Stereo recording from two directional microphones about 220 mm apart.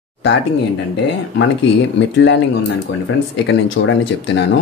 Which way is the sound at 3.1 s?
65° left (ahead or behind).